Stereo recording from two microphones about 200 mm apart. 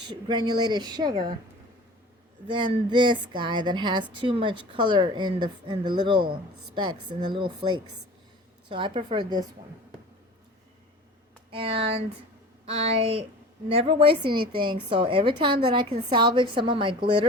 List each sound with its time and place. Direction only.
0.1 s speech: 20° right (ahead or behind)
2.5 s speech: 25° right (ahead or behind)
11.5 s speech: 25° right (ahead or behind)